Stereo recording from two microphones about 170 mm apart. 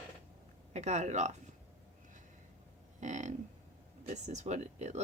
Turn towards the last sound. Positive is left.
turn(degrees=-40)  # may be behind; listen again after turning